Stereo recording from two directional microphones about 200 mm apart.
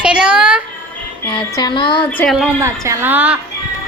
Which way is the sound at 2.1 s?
10° left (ahead or behind).